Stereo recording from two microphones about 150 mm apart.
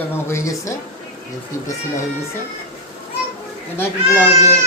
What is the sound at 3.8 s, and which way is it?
Speech, 15° left (ahead or behind).